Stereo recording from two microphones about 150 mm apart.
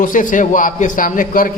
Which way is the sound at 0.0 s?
60° left (ahead or behind).